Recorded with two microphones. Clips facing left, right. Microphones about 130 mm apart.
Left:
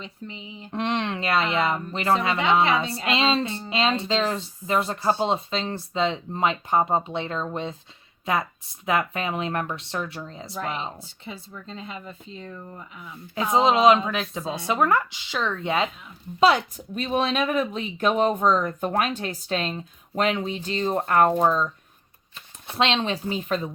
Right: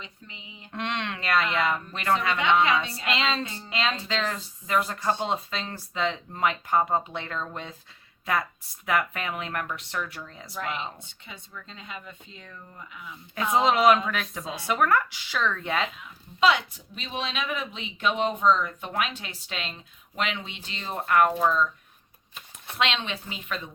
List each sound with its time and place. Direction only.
0.0 s speech: 35° left (ahead or behind)
16.4 s speech: 40° left (ahead or behind)
22.8 s speech: 30° left (ahead or behind)